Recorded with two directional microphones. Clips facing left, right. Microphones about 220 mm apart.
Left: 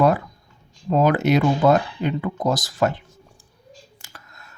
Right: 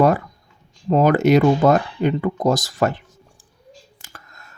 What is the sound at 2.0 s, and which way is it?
Speech, 50° right (ahead or behind).